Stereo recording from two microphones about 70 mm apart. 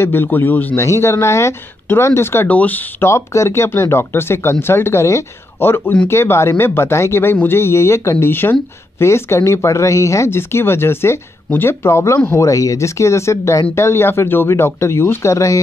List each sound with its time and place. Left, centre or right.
0.0 s speech: left
0.7 s speech: left
2.4 s speech: left
3.0 s speech: left